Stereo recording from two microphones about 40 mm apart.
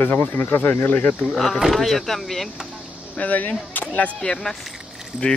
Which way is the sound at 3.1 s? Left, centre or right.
Left.